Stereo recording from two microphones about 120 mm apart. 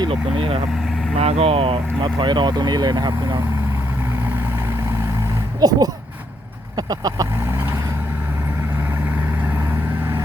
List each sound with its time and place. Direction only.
0.0 s speech: 45° right (ahead or behind)
5.5 s speech: 35° right (ahead or behind)